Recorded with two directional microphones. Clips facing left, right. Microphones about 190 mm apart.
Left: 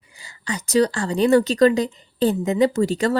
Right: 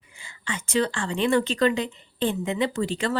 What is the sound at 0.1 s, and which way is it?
A woman's voice, 40° left (ahead or behind).